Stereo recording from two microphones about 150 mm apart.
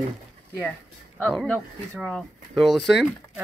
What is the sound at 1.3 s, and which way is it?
Speech, centre (ahead or behind).